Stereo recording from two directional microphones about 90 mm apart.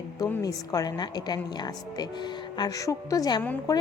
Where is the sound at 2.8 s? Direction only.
40° left (ahead or behind).